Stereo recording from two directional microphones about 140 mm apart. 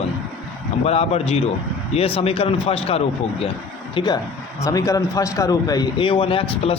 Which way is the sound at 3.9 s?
30° left (ahead or behind).